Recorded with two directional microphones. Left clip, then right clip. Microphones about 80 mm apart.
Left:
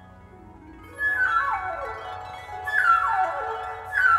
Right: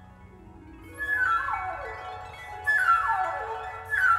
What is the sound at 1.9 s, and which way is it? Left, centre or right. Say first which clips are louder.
Music: left 4 dB; left.